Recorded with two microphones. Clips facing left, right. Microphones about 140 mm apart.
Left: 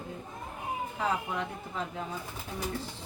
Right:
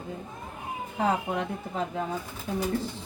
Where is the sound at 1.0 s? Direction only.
50° right (ahead or behind).